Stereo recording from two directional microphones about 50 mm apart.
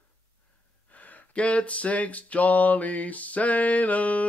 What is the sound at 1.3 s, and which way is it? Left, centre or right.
Mantra, left.